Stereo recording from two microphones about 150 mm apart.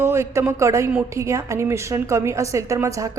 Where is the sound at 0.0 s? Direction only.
15° right (ahead or behind).